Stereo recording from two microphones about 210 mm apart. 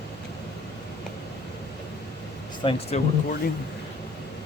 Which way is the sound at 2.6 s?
25° left (ahead or behind).